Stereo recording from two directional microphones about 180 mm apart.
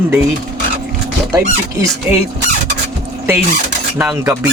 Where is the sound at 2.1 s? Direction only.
10° right (ahead or behind).